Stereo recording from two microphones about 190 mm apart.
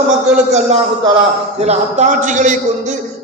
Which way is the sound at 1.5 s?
35° right (ahead or behind).